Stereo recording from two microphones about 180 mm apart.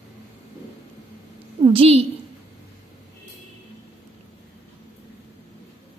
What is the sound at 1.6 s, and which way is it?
Speech, 30° right (ahead or behind).